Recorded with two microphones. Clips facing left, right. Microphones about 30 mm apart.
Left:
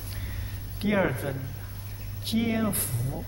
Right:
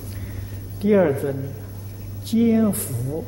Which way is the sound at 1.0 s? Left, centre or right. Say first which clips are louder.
Right 8 dB; centre.